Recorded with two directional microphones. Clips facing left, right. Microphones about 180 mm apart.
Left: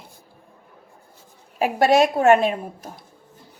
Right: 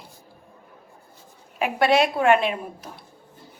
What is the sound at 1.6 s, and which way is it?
A woman's voice, 45° left (ahead or behind).